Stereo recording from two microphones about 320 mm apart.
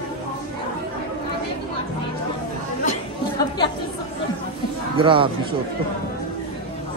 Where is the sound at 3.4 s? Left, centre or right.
Centre.